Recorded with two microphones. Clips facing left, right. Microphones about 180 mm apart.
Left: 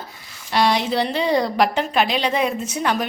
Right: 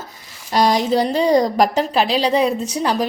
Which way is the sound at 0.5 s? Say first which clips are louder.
Right 3 dB; 40° right (ahead or behind).